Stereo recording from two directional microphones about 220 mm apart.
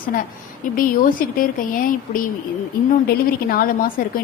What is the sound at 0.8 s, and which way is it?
A woman's voice, 40° left (ahead or behind).